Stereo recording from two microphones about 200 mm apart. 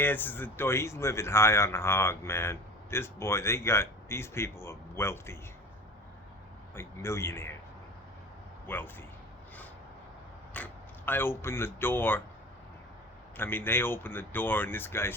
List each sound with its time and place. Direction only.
0.0 s a man's voice: 10° left (ahead or behind)
6.7 s a man's voice: 15° left (ahead or behind)
8.6 s speech: 10° left (ahead or behind)
10.5 s speech: 10° left (ahead or behind)
13.3 s a man's voice: 10° left (ahead or behind)